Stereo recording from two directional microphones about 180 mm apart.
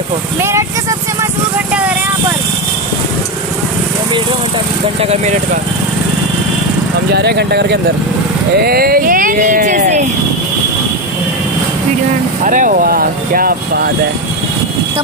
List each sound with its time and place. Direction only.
0.4 s speech: 15° right (ahead or behind)
5.0 s speech: 40° right (ahead or behind)
7.1 s speech: 65° right (ahead or behind); by 10.0 s 40° right (ahead or behind)
12.4 s speech: 45° right (ahead or behind)